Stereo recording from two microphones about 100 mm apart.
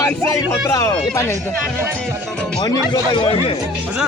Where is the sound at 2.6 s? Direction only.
50° left (ahead or behind).